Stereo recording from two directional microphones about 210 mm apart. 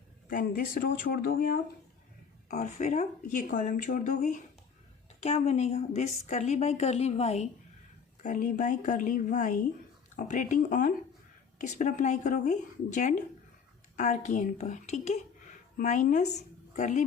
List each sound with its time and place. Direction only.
0.3 s speech: 40° left (ahead or behind)
2.5 s a woman's voice: 35° left (ahead or behind)